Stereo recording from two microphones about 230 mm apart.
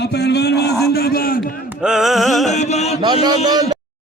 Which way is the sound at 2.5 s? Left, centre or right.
Left.